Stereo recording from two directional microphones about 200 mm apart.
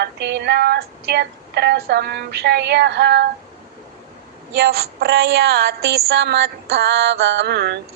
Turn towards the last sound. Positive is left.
turn(degrees=-55)  # may be behind; listen again after turning